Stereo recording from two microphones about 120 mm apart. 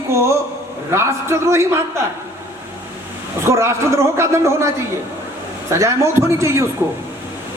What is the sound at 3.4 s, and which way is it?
A man's voice, 20° right (ahead or behind).